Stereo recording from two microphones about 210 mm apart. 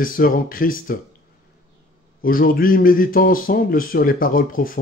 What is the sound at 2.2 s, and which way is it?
Speech, 45° left (ahead or behind).